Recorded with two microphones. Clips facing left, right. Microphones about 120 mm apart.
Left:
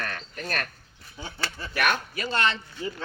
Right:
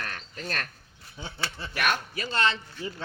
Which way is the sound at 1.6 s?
25° right (ahead or behind).